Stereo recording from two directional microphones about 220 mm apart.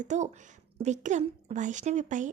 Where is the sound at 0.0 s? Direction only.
35° right (ahead or behind).